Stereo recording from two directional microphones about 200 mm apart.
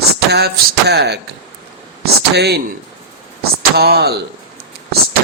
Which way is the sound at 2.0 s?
55° right (ahead or behind).